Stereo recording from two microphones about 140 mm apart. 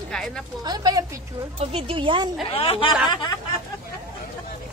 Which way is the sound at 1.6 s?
45° right (ahead or behind).